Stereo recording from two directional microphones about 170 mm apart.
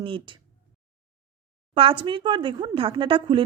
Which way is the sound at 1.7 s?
35° right (ahead or behind).